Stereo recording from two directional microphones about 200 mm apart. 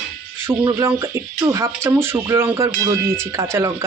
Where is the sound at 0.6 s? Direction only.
15° right (ahead or behind).